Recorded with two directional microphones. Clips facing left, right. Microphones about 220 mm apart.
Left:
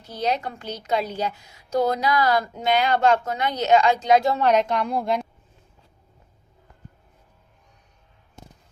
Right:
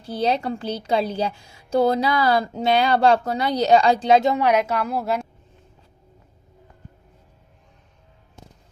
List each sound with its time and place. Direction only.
0.0 s a woman's voice: 30° right (ahead or behind); by 5.2 s 5° right (ahead or behind)